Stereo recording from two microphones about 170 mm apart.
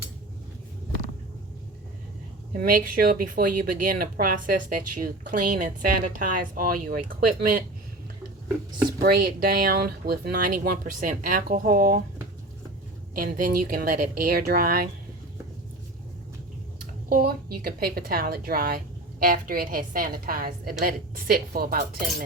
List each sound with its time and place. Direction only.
2.5 s speech: 55° right (ahead or behind)
9.0 s speech: 60° right (ahead or behind)
13.1 s speech: 55° right (ahead or behind)
17.1 s speech: 60° right (ahead or behind)